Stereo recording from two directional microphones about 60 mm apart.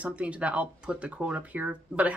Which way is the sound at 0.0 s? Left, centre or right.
Right.